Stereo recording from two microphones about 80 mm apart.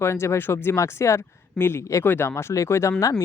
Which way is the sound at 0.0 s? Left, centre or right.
Left.